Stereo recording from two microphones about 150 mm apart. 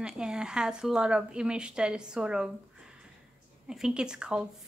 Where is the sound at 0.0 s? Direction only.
5° right (ahead or behind).